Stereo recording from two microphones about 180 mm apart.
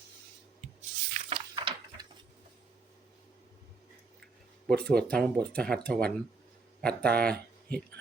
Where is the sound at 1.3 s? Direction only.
25° right (ahead or behind).